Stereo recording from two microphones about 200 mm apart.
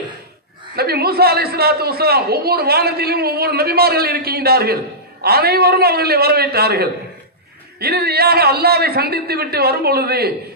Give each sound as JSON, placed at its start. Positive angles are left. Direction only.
{"t": 0.7, "sound": "a man's voice", "side_deg": -50}